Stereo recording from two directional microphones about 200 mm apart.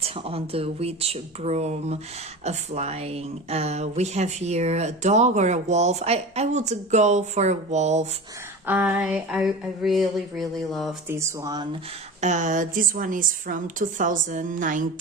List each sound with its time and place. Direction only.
0.0 s speech: 30° right (ahead or behind)
8.6 s speech: 10° right (ahead or behind)
11.1 s speech: 15° right (ahead or behind)
12.2 s speech: 40° right (ahead or behind)